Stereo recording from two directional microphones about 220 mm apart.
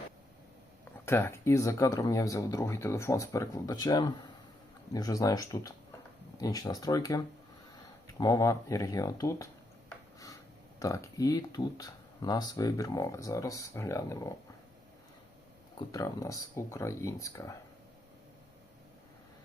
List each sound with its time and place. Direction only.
1.0 s speech: 10° left (ahead or behind)
10.8 s speech: 15° left (ahead or behind)
15.8 s speech: 15° left (ahead or behind)